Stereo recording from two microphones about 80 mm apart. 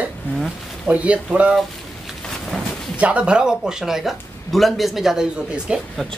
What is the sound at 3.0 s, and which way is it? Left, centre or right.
Speech, centre.